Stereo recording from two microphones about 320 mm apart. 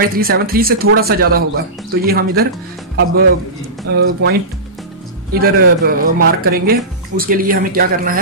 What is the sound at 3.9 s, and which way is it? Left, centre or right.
Speech, right.